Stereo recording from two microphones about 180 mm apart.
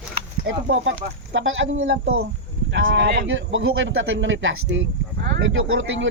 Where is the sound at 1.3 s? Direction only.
90° right.